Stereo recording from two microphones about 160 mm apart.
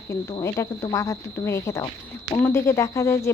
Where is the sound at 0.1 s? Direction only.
20° left (ahead or behind).